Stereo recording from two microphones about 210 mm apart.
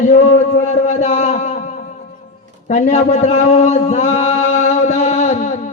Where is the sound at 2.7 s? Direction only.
35° left (ahead or behind).